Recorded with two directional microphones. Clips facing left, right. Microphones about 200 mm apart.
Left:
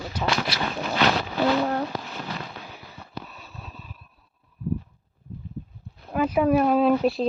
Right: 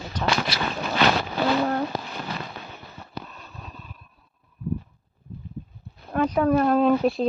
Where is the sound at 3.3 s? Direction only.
5° left (ahead or behind).